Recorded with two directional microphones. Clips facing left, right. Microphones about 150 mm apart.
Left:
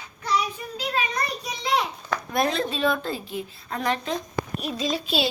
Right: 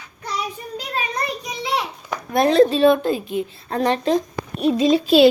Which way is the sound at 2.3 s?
25° right (ahead or behind).